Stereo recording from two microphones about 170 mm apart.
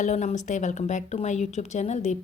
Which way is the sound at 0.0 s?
45° left (ahead or behind).